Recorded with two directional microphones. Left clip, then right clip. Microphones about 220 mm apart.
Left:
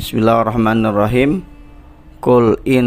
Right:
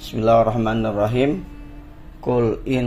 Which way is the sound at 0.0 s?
45° left (ahead or behind).